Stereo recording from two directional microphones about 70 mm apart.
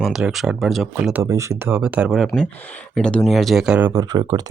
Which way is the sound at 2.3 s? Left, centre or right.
Left.